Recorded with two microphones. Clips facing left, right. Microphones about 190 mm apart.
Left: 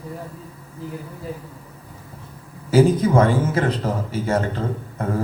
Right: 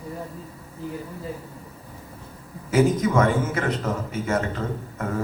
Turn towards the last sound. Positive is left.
turn(degrees=30)  # may be behind; listen again after turning